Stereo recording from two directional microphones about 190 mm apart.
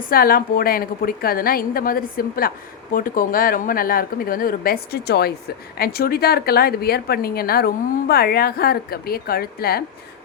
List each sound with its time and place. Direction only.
0.0 s a woman's voice: 50° left (ahead or behind)